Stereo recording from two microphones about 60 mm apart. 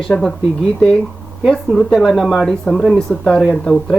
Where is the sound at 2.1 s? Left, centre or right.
Centre.